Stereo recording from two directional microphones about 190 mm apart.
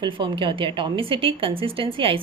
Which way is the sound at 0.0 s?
25° right (ahead or behind).